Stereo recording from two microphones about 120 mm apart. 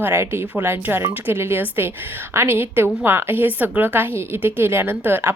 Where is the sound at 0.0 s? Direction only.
20° right (ahead or behind).